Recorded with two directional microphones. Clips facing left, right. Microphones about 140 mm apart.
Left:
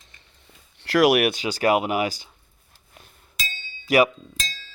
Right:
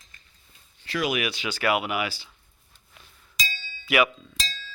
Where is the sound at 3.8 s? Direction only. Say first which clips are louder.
Left 5 dB; 40° left (ahead or behind).